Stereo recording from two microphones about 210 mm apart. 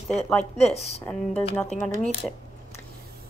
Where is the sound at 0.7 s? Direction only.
30° left (ahead or behind).